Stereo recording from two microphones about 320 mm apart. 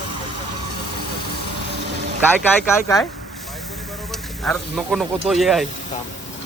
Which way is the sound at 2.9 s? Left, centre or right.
Centre.